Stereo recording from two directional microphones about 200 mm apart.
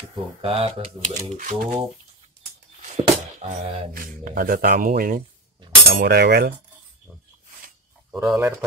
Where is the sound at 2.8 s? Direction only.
35° right (ahead or behind).